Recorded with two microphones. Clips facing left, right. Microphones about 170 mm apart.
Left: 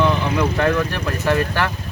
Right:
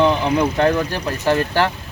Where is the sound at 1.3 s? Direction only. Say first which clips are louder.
Right 2 dB; 30° right (ahead or behind).